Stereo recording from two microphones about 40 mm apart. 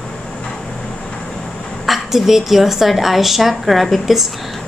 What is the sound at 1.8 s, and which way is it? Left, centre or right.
A woman's voice, centre.